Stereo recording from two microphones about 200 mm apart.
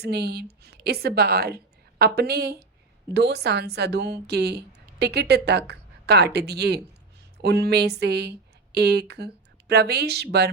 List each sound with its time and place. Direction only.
0.0 s a woman's voice: 55° right (ahead or behind)